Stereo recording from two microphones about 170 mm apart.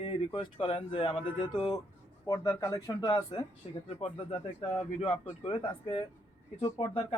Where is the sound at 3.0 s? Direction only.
25° left (ahead or behind).